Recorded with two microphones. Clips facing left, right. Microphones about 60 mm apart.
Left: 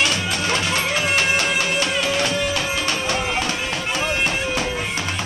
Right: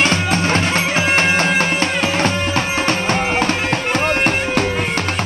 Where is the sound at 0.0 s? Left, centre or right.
Right.